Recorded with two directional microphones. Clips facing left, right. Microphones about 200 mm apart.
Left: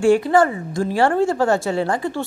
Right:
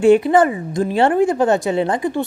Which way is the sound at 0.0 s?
20° right (ahead or behind).